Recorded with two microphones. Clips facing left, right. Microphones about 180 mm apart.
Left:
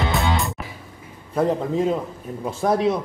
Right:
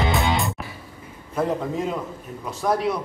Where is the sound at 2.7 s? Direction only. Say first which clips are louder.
Left 3 dB; 25° left (ahead or behind).